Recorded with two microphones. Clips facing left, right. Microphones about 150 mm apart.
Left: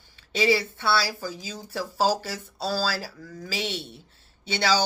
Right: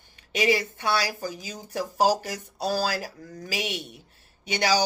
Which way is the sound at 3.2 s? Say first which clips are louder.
Even; 40° right (ahead or behind).